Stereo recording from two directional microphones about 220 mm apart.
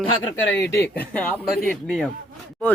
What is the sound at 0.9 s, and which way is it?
Speech, 5° left (ahead or behind).